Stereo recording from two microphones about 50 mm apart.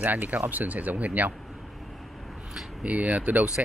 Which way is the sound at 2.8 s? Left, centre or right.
Right.